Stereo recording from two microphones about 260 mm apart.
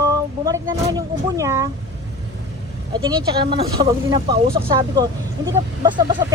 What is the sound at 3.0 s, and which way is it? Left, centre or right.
Speech, centre.